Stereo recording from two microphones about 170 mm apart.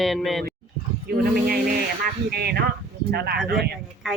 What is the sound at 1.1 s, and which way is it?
Speech, 70° right (ahead or behind).